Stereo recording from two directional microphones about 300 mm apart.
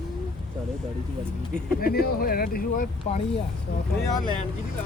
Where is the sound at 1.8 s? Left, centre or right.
Left.